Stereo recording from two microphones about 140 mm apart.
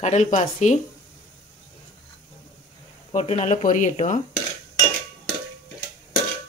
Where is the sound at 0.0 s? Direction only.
55° left (ahead or behind).